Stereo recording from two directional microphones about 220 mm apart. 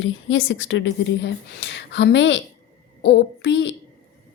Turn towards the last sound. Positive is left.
turn(degrees=55)  # may be behind; listen again after turning